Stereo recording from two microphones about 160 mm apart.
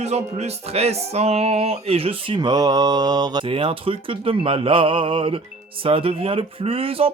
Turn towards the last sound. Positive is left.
turn(degrees=-35)  # may be behind; listen again after turning